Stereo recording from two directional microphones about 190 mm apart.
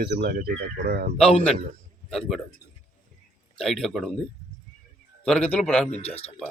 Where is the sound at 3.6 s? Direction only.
Centre (ahead or behind).